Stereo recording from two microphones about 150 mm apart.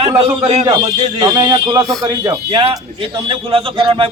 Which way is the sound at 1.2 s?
25° right (ahead or behind).